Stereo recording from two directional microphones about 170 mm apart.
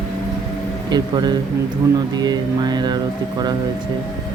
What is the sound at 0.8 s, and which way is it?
Speech, 25° right (ahead or behind).